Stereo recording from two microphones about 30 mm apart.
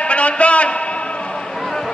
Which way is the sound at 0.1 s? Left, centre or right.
Left.